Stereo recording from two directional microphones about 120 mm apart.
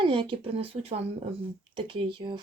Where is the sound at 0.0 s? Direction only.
45° right (ahead or behind).